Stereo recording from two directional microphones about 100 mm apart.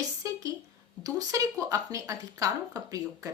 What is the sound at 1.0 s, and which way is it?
Speech, 35° right (ahead or behind).